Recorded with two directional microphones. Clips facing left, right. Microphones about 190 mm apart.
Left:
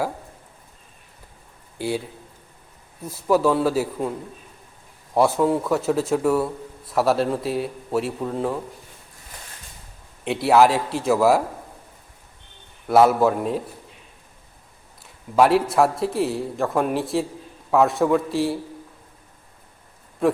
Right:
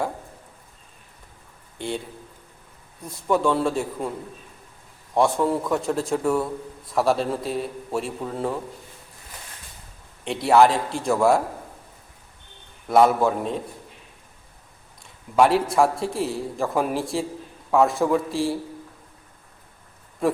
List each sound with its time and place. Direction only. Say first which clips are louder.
1.8 s a man's voice: left 4 dB; 5° left (ahead or behind)
3.1 s a man's voice: left 3 dB; 5° left (ahead or behind)
5.1 s a man's voice: left 2 dB; 5° left (ahead or behind)
10.2 s a man's voice: left 1 dB; centre (ahead or behind)
12.9 s a man's voice: left 2 dB; 5° left (ahead or behind)
15.0 s a man's voice: left 1 dB; centre (ahead or behind)
20.2 s speech: left 3 dB; centre (ahead or behind)